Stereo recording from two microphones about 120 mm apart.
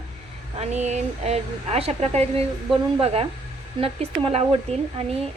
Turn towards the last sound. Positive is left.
turn(degrees=-60)  # may be behind; listen again after turning